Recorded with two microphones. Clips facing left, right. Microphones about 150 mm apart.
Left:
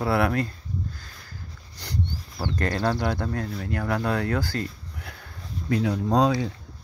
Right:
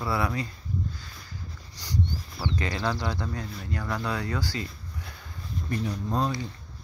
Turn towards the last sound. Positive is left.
turn(degrees=90)